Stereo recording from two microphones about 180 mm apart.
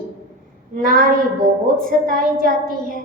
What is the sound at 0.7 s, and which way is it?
A woman's voice, 50° right (ahead or behind).